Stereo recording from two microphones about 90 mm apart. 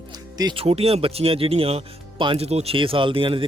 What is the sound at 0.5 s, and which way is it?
Speech, 90° right.